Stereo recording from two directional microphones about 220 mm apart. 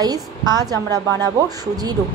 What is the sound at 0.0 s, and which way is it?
Speech, 15° right (ahead or behind).